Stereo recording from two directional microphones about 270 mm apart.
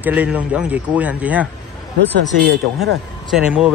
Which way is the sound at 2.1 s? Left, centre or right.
Right.